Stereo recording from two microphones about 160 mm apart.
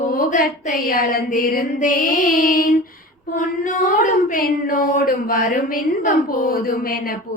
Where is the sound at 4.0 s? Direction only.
50° left (ahead or behind).